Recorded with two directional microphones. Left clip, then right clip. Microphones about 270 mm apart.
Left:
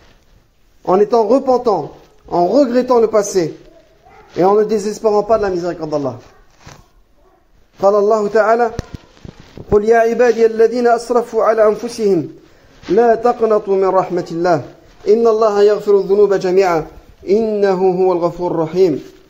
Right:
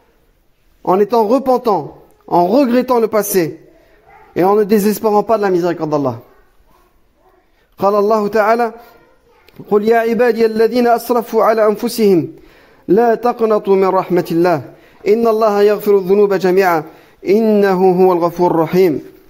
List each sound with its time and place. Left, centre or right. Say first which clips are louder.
0.8 s a man's voice: even; right
7.7 s a man's voice: left 1 dB; right